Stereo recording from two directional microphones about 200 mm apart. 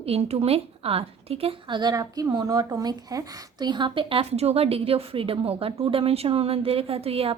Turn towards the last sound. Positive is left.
turn(degrees=-30)  # may be behind; listen again after turning